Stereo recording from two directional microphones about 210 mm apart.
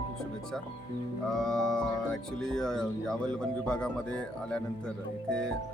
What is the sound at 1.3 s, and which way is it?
Speech, centre (ahead or behind).